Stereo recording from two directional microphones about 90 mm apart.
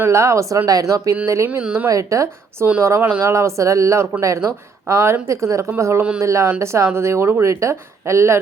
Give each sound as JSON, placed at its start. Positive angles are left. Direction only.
{"t": 0.0, "sound": "speech", "side_deg": -30}
{"t": 1.5, "sound": "speech", "side_deg": -20}
{"t": 1.9, "sound": "speech", "side_deg": -35}
{"t": 3.0, "sound": "speech", "side_deg": -20}
{"t": 3.3, "sound": "speech", "side_deg": -35}